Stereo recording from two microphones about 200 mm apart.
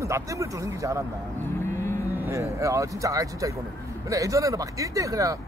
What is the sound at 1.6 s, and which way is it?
Vehicle, 10° left (ahead or behind).